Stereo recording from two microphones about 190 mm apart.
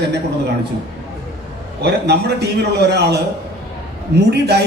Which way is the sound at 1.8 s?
60° right (ahead or behind).